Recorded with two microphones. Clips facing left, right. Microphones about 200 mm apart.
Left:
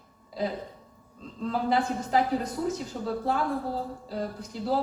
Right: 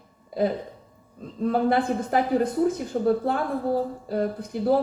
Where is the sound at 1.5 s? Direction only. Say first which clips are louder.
Right 4 dB; 55° right (ahead or behind).